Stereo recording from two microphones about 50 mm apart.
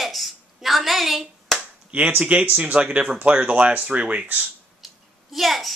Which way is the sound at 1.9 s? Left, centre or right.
Right.